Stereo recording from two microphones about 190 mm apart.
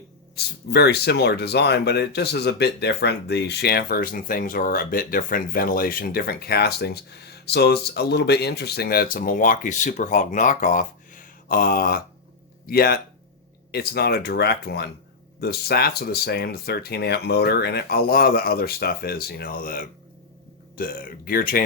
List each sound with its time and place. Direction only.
0.3 s speech: 60° left (ahead or behind)